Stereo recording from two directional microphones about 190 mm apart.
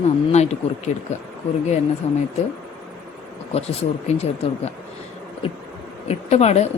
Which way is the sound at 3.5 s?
30° left (ahead or behind).